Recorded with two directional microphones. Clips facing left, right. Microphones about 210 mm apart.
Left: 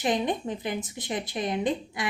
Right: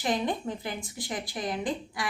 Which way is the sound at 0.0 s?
20° left (ahead or behind).